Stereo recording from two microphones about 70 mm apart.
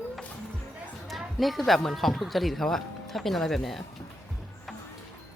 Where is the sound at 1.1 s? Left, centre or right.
Centre.